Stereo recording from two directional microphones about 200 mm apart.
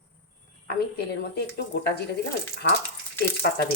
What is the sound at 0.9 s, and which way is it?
Speech, 50° left (ahead or behind).